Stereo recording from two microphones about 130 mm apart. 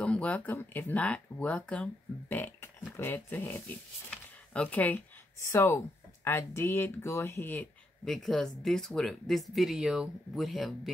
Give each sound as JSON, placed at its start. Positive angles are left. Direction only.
{"t": 0.0, "sound": "speech", "side_deg": 10}
{"t": 4.1, "sound": "a sound", "side_deg": 10}
{"t": 5.4, "sound": "speech", "side_deg": 20}
{"t": 8.0, "sound": "speech", "side_deg": 0}